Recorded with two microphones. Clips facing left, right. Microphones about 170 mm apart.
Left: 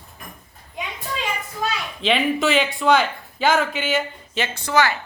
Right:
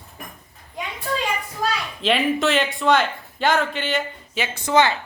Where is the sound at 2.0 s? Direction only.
Centre (ahead or behind).